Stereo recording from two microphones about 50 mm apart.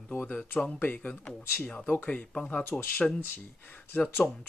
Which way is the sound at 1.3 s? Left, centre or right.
Centre.